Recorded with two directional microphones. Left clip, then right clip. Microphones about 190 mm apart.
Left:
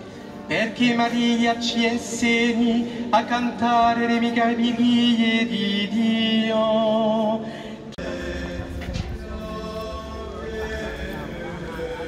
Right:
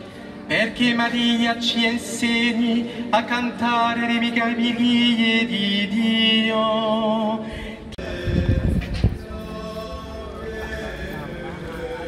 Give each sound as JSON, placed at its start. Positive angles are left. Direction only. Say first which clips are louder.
{"t": 0.5, "sound": "music", "louder": "right 2 dB", "side_deg": -55}
{"t": 1.7, "sound": "speech", "louder": "right 2 dB", "side_deg": -50}